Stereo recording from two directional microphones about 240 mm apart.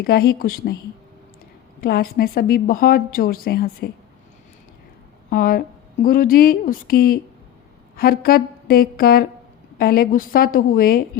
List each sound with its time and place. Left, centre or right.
0.0 s a woman's voice: left
1.8 s a woman's voice: left
5.3 s a woman's voice: left